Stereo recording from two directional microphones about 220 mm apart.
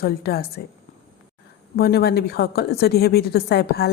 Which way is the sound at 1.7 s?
45° left (ahead or behind).